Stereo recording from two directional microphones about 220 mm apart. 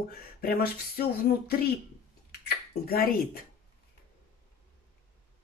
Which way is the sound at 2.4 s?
45° left (ahead or behind).